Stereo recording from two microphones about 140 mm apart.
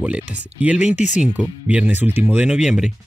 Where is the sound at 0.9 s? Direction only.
60° left (ahead or behind).